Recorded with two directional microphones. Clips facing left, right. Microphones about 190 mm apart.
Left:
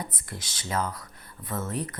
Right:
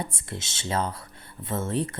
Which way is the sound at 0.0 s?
25° right (ahead or behind).